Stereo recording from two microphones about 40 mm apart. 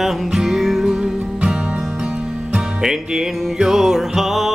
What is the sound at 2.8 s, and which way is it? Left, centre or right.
Music, centre.